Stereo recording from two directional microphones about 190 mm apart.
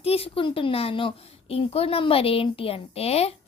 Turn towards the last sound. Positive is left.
turn(degrees=35)  # may be behind; listen again after turning